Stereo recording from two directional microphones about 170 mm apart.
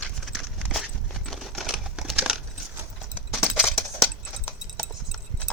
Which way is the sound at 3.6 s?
5° left (ahead or behind).